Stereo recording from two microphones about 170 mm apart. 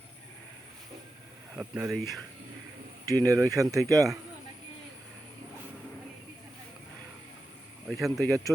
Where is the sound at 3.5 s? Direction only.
20° right (ahead or behind).